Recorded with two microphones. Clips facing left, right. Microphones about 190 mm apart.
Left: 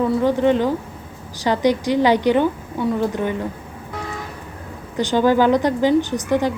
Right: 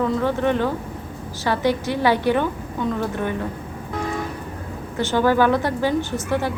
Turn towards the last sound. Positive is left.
turn(degrees=15)  # may be behind; listen again after turning